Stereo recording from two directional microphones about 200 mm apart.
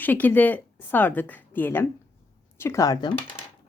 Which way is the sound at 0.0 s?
10° left (ahead or behind).